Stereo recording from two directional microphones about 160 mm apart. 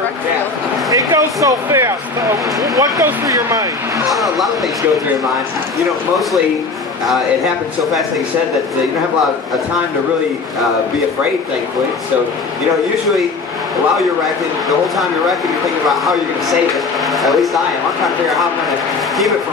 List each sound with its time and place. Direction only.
0.9 s speech: 20° right (ahead or behind)
4.1 s a man's voice: centre (ahead or behind)
15.9 s a man's voice: centre (ahead or behind)